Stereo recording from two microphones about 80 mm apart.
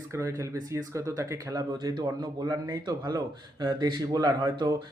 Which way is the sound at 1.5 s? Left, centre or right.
Right.